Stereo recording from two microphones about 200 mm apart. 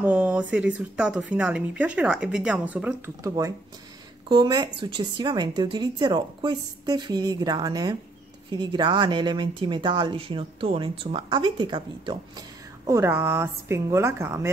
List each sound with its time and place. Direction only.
0.0 s speech: 5° right (ahead or behind)